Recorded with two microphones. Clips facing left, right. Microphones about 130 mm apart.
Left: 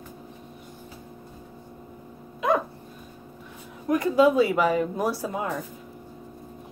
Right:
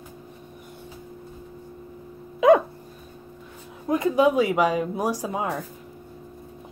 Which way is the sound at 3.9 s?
20° right (ahead or behind).